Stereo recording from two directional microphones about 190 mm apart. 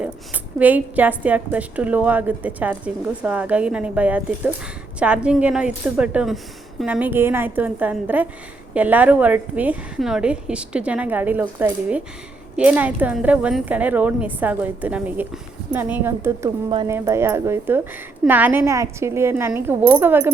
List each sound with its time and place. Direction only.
0.6 s a woman's voice: 10° right (ahead or behind)
16.6 s speech: 25° right (ahead or behind)
16.9 s a woman's voice: 15° right (ahead or behind)